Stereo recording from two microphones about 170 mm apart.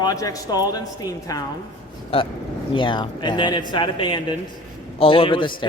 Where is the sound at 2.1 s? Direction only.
35° left (ahead or behind).